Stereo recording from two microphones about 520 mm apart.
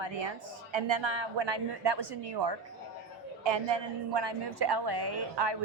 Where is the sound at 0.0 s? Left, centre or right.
Right.